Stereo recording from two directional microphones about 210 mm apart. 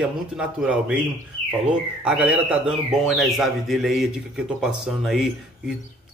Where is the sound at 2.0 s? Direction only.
5° right (ahead or behind).